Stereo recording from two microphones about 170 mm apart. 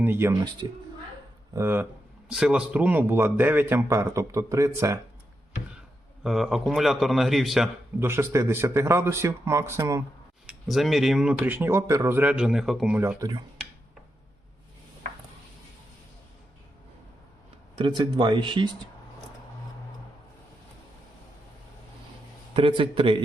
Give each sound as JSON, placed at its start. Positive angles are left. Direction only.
{"t": 0.0, "sound": "speech", "side_deg": -15}
{"t": 0.6, "sound": "speech", "side_deg": -25}
{"t": 1.5, "sound": "speech", "side_deg": -15}
{"t": 6.2, "sound": "speech", "side_deg": 0}
{"t": 7.9, "sound": "speech", "side_deg": -15}
{"t": 10.4, "sound": "speech", "side_deg": 0}
{"t": 13.0, "sound": "speech", "side_deg": -15}
{"t": 17.7, "sound": "speech", "side_deg": -30}
{"t": 22.5, "sound": "speech", "side_deg": -30}